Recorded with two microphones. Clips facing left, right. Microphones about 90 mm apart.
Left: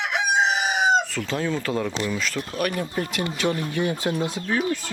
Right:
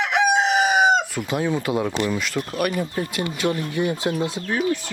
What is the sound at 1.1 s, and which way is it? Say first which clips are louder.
Speech: right 3 dB; 10° right (ahead or behind).